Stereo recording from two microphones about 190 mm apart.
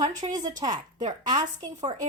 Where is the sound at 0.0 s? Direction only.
20° right (ahead or behind).